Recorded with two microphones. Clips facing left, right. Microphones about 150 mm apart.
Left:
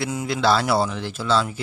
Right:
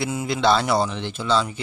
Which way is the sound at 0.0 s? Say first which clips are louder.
Right 1 dB; centre (ahead or behind).